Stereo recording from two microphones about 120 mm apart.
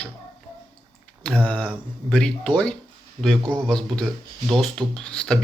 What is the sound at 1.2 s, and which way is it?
Speech, 10° left (ahead or behind).